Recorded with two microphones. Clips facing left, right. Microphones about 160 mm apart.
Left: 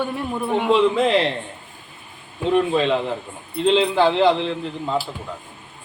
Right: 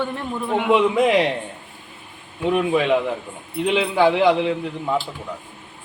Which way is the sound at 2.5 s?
15° right (ahead or behind).